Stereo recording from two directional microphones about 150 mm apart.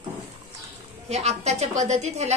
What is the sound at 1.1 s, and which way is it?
A woman's voice, 45° right (ahead or behind).